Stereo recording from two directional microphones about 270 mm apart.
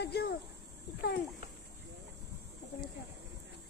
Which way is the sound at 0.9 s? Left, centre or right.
Left.